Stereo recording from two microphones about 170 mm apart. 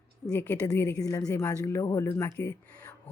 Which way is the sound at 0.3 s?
15° left (ahead or behind).